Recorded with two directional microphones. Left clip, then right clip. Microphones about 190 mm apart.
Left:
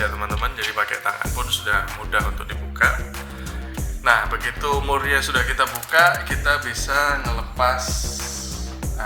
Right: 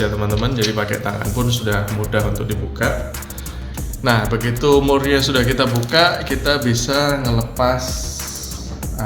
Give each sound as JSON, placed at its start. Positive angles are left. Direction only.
{"t": 0.4, "sound": "speech", "side_deg": 45}
{"t": 4.0, "sound": "speech", "side_deg": 40}